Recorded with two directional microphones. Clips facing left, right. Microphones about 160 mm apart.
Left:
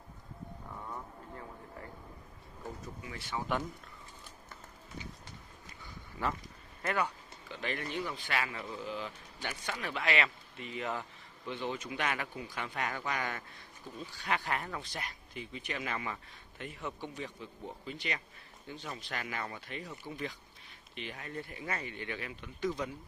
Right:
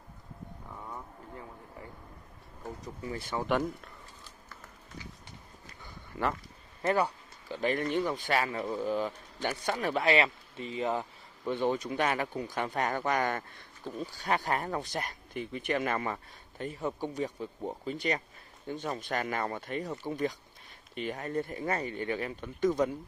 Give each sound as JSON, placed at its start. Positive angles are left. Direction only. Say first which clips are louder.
{"t": 3.0, "sound": "speech", "louder": "right 7 dB", "side_deg": -40}
{"t": 6.2, "sound": "speech", "louder": "right 4 dB", "side_deg": -70}
{"t": 6.8, "sound": "a sound", "louder": "right 6 dB", "side_deg": -35}
{"t": 8.0, "sound": "speech", "louder": "right 6 dB", "side_deg": -40}
{"t": 11.4, "sound": "speech", "louder": "right 8 dB", "side_deg": -45}